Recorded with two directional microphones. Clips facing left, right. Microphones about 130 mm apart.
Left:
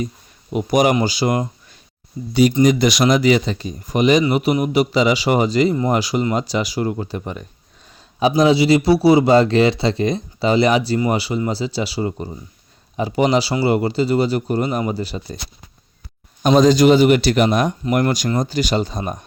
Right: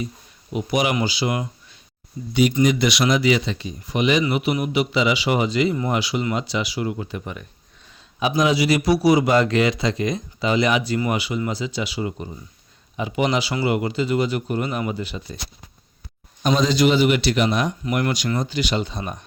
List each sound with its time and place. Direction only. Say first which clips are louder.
0.5 s a man's voice: left 6 dB; 45° left (ahead or behind)
2.6 s speech: left 4 dB; 40° left (ahead or behind)
16.4 s a man's voice: left 6 dB; 45° left (ahead or behind)